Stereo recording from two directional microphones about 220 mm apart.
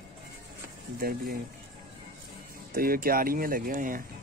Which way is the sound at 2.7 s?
40° right (ahead or behind).